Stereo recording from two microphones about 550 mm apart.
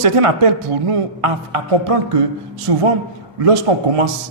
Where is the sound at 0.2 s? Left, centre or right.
Right.